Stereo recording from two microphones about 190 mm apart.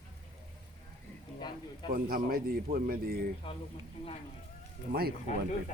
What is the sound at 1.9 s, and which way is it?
A man's voice, 50° right (ahead or behind).